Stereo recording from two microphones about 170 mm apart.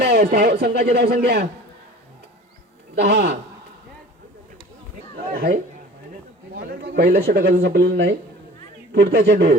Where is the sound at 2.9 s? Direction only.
70° right (ahead or behind).